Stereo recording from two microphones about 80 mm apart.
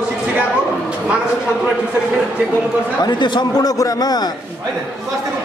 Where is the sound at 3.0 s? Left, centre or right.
Left.